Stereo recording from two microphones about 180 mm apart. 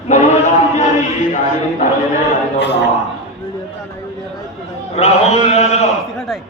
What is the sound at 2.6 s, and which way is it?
Speech, 70° left (ahead or behind).